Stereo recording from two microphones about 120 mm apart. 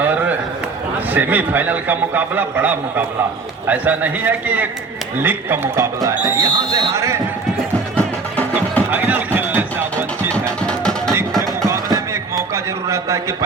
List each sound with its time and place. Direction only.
0.0 s a sound: 15° right (ahead or behind)
1.1 s a man's voice: 15° right (ahead or behind)
7.9 s music: 15° left (ahead or behind)
8.9 s music: 15° right (ahead or behind)
10.3 s music: 10° left (ahead or behind)
11.6 s a sound: 25° right (ahead or behind)